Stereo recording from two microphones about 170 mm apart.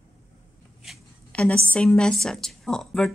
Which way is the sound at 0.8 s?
5° left (ahead or behind).